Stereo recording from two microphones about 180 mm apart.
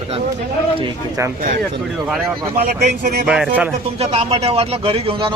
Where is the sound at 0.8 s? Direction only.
20° right (ahead or behind).